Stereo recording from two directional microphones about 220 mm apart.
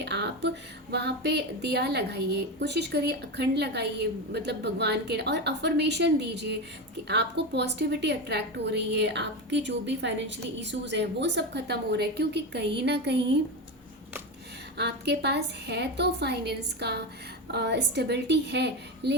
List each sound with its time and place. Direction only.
0.0 s a woman's voice: 50° right (ahead or behind)
14.8 s a woman's voice: 50° right (ahead or behind)